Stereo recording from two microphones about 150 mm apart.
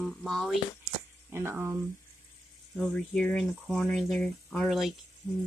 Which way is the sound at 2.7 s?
5° left (ahead or behind).